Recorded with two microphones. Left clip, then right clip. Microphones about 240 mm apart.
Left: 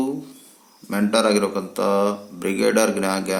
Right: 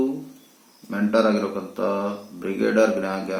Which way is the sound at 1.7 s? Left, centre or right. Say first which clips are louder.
Left 5 dB; left.